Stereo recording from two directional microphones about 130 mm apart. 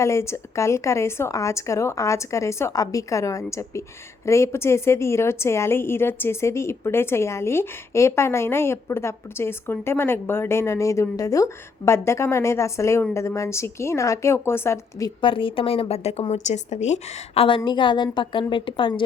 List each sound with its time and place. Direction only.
0.0 s a woman's voice: 20° left (ahead or behind)
15.2 s a woman's voice: 40° left (ahead or behind); by 17.4 s 60° left (ahead or behind)
17.7 s a woman's voice: 40° left (ahead or behind)